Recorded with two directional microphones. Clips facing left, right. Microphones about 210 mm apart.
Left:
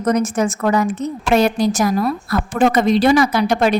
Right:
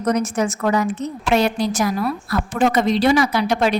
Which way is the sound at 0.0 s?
50° left (ahead or behind).